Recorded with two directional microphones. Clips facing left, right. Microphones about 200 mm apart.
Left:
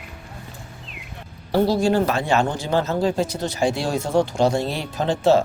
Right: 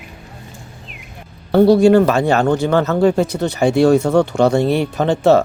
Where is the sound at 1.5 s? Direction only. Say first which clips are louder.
Right 9 dB; 60° right (ahead or behind).